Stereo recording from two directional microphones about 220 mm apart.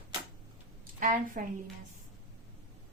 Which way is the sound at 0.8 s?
35° right (ahead or behind).